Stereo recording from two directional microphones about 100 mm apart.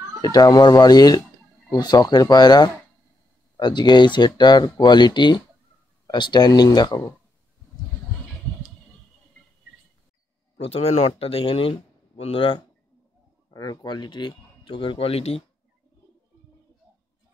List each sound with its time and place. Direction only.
0.2 s speech: 40° left (ahead or behind)
10.6 s speech: 85° left; by 12.6 s 60° left (ahead or behind)
13.5 s speech: 40° left (ahead or behind); by 15.4 s 80° left